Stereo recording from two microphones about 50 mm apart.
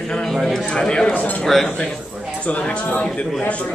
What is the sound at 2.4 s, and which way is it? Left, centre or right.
Speech, left.